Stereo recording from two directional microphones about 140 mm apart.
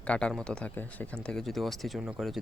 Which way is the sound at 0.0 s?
10° left (ahead or behind).